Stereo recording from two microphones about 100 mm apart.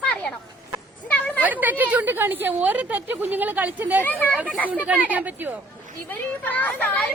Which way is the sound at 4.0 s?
20° left (ahead or behind).